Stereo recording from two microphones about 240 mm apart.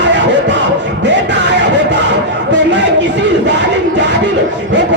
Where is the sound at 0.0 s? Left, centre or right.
Right.